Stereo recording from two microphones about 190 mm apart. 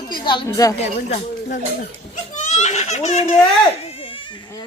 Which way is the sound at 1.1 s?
40° left (ahead or behind).